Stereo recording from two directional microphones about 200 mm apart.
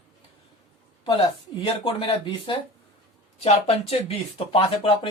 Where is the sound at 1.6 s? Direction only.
25° left (ahead or behind).